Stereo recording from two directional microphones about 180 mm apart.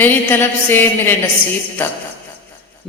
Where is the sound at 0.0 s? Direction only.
10° left (ahead or behind).